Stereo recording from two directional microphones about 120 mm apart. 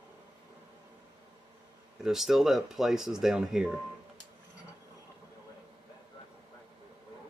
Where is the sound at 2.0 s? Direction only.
Centre (ahead or behind).